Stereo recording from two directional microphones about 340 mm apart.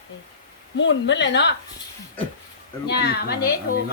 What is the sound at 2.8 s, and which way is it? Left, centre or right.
Speech, left.